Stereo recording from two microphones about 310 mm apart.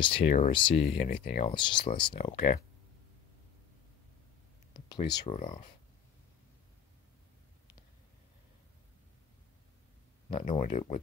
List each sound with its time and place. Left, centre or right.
0.0 s speech: centre
4.7 s speech: centre
10.3 s speech: centre